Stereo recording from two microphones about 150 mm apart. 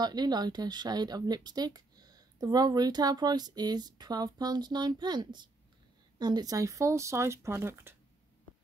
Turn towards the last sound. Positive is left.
turn(degrees=-15)  # may be behind; listen again after turning